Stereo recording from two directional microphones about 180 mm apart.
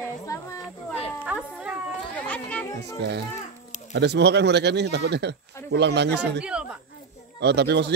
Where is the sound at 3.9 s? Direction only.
70° right (ahead or behind).